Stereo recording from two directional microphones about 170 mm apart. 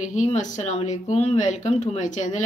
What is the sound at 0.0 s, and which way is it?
Speech, 45° left (ahead or behind).